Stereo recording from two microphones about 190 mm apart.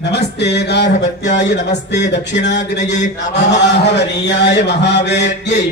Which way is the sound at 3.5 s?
65° left (ahead or behind).